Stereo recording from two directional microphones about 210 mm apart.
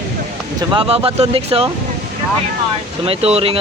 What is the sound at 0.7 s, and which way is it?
Speech, 25° right (ahead or behind).